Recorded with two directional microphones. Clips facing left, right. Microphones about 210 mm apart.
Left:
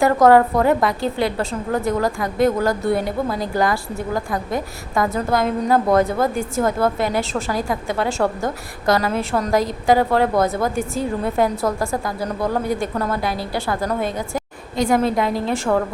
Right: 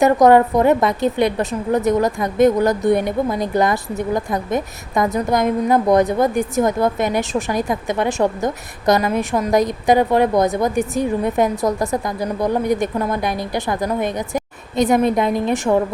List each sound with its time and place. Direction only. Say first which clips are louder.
0.0 s a woman's voice: right 1 dB; 20° right (ahead or behind)